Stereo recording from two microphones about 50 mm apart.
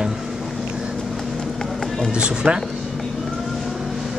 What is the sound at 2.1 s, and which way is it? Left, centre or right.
Speech, centre.